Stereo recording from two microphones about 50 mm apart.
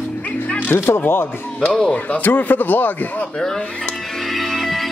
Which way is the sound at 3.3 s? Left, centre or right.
Centre.